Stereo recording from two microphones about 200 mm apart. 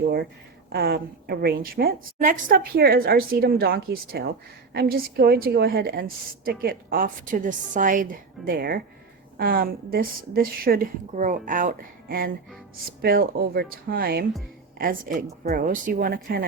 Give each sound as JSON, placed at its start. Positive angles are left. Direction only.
{"t": 0.7, "sound": "a woman's voice", "side_deg": -50}